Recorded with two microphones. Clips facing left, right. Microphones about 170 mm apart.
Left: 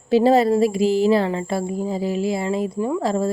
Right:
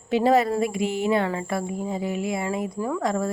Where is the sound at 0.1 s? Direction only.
30° left (ahead or behind).